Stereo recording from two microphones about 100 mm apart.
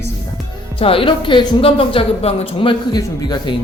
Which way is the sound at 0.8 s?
65° left (ahead or behind).